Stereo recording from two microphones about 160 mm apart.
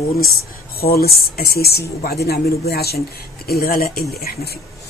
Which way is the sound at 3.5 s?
65° left (ahead or behind).